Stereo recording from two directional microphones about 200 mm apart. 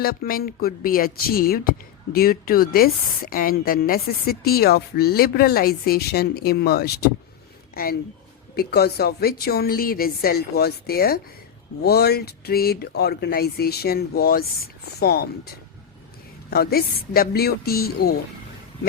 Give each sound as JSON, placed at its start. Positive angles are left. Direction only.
{"t": 0.0, "sound": "a woman's voice", "side_deg": 50}